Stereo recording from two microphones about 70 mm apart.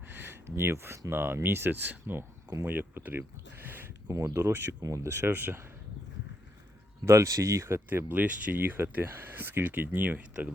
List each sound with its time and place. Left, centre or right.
0.0 s a sound: right
0.4 s speech: right
4.1 s speech: right
4.8 s speech: right
5.1 s speech: right
7.0 s speech: right
7.9 s speech: right